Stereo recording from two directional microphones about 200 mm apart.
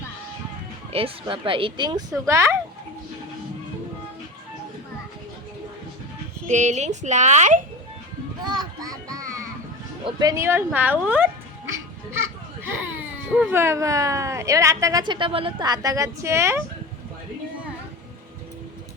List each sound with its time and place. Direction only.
0.9 s speech: 25° right (ahead or behind)
6.5 s a woman's voice: 35° right (ahead or behind)
8.4 s children playing: 20° right (ahead or behind)
9.1 s music: 15° right (ahead or behind)
10.1 s speech: 20° right (ahead or behind)